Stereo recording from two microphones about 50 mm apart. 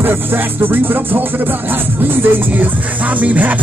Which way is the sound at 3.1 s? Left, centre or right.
Right.